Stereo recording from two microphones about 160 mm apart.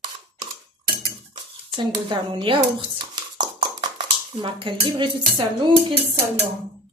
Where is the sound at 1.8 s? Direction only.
30° right (ahead or behind).